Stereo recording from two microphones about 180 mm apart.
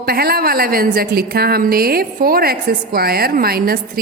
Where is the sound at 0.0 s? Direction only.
55° right (ahead or behind).